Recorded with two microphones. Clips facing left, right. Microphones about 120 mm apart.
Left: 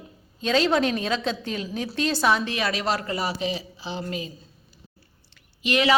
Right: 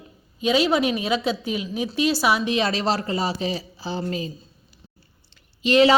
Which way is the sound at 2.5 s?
30° right (ahead or behind).